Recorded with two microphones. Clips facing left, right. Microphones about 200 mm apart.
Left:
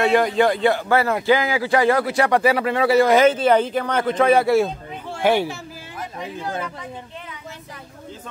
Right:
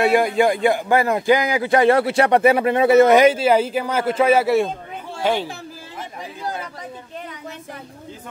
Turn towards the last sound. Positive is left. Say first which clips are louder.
# left 1 dB
turn(degrees=-35)  # may be behind; listen again after turning